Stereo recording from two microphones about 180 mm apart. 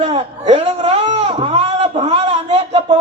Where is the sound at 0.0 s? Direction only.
30° right (ahead or behind).